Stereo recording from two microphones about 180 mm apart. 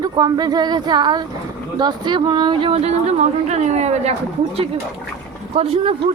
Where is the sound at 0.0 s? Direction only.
20° right (ahead or behind); by 4.1 s 40° right (ahead or behind).